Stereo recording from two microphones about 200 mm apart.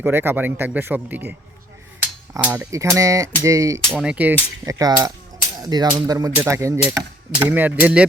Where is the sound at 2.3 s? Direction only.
10° right (ahead or behind).